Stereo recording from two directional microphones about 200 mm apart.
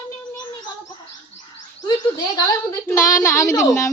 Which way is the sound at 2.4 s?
15° left (ahead or behind).